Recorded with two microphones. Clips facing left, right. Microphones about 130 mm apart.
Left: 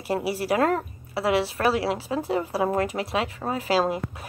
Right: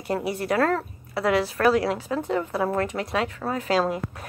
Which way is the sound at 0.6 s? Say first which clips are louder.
Even; 15° left (ahead or behind).